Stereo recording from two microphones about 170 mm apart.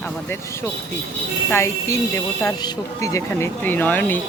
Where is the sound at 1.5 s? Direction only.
15° left (ahead or behind).